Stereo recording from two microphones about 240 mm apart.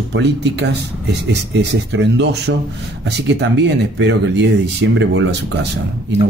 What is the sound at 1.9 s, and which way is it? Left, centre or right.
Speech, right.